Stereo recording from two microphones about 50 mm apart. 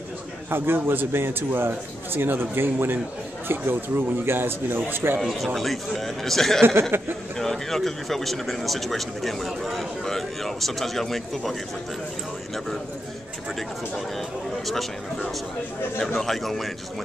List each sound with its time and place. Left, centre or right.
0.5 s a man's voice: right
5.2 s speech: centre
6.6 s speech: right
7.3 s speech: centre
16.2 s speech: centre